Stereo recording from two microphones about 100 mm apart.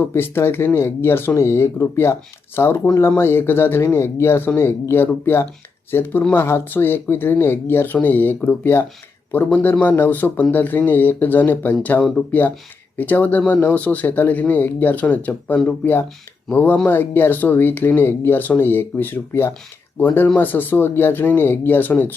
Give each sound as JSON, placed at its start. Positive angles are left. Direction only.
{"t": 0.0, "sound": "speech", "side_deg": 25}